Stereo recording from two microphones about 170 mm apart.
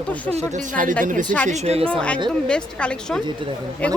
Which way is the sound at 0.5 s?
50° right (ahead or behind).